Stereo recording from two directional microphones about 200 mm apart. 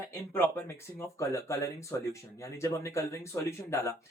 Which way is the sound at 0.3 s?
10° left (ahead or behind).